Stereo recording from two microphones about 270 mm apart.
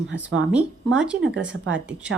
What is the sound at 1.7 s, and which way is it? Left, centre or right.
Speech, right.